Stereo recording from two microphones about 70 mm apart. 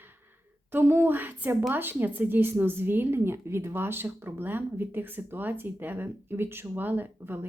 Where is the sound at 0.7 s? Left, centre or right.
Right.